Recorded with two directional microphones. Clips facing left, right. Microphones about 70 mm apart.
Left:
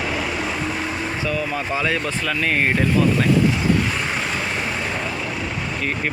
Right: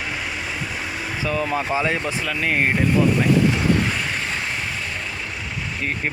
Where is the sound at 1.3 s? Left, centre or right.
Right.